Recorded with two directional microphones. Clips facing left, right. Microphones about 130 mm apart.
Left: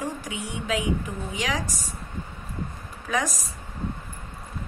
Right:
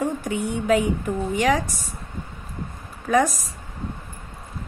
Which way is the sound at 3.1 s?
50° right (ahead or behind).